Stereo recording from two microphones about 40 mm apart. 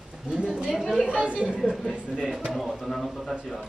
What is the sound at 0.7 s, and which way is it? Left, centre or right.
Speech, centre.